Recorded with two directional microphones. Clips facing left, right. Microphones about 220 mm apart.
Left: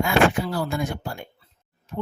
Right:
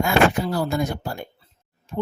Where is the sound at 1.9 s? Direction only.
30° right (ahead or behind).